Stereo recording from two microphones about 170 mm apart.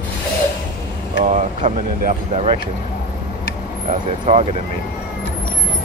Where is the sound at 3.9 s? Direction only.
40° right (ahead or behind).